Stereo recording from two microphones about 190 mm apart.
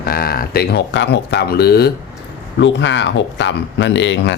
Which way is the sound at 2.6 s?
70° left (ahead or behind).